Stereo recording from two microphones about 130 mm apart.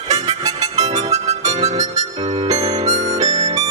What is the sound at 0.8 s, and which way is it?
Harmonica, 60° right (ahead or behind).